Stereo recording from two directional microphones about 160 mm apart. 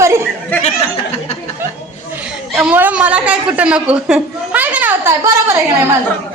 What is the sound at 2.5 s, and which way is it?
A child's voice, 5° right (ahead or behind).